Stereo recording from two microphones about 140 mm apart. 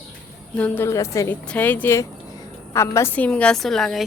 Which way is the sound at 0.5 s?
10° left (ahead or behind).